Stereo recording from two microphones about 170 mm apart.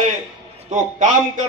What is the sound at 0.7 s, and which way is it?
Speech, 45° right (ahead or behind).